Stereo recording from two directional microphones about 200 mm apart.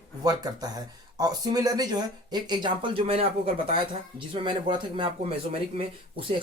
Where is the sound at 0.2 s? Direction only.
20° right (ahead or behind).